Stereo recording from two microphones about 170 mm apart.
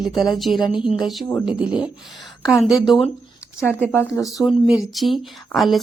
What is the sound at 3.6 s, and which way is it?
Speech, 15° left (ahead or behind).